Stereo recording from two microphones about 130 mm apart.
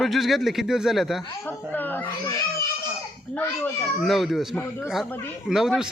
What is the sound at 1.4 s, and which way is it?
Speech, 15° left (ahead or behind).